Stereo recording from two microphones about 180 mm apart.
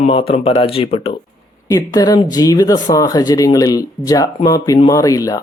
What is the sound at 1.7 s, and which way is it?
Speech, 20° left (ahead or behind).